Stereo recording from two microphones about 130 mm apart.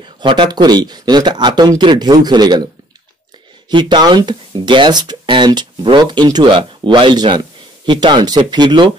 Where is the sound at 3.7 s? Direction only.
35° right (ahead or behind).